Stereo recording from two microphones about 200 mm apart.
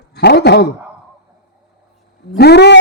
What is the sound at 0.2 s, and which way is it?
Speech, 55° left (ahead or behind).